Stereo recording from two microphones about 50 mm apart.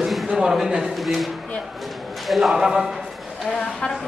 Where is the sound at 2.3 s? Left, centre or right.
Centre.